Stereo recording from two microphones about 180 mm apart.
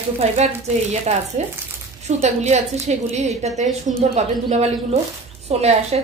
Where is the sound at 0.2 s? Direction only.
35° right (ahead or behind).